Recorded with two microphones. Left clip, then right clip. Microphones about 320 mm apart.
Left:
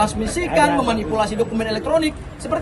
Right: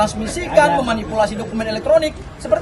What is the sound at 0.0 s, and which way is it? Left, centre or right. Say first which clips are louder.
Speech: right 1 dB; centre.